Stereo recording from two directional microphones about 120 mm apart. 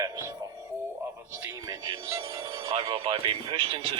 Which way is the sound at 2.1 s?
25° right (ahead or behind).